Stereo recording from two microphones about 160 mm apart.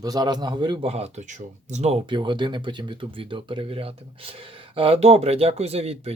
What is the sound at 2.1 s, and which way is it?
Speech, 30° right (ahead or behind).